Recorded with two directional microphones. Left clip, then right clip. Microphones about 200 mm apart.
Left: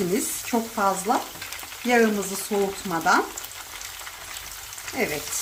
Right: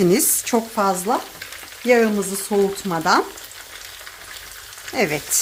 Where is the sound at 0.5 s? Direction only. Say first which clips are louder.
Right 4 dB; 45° right (ahead or behind).